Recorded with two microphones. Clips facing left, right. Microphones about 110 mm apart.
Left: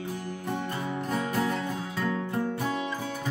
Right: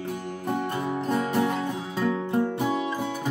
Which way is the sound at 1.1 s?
25° right (ahead or behind).